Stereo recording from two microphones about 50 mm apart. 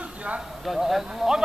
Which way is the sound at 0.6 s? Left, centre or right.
Centre.